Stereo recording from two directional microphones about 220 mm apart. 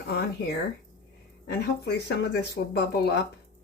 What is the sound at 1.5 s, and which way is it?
Speech, 50° left (ahead or behind).